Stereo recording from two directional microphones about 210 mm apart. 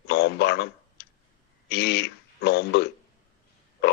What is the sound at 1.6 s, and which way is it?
A man's voice, 50° left (ahead or behind).